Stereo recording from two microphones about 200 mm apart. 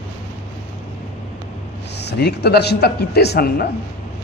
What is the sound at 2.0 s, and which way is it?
A man's voice, 55° left (ahead or behind).